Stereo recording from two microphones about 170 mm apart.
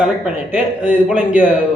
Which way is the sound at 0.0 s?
5° right (ahead or behind).